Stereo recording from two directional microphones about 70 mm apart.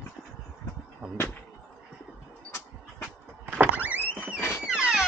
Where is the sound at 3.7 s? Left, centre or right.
Right.